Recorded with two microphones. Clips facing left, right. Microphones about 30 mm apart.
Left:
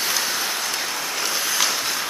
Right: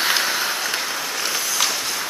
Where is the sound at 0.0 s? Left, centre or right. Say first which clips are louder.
Right 4 dB; right.